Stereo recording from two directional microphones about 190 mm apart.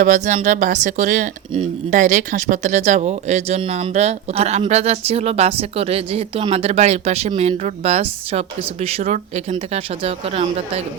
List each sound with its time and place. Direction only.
0.0 s speech: 40° right (ahead or behind)